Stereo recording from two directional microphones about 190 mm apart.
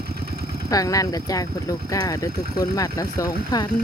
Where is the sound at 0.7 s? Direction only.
20° left (ahead or behind).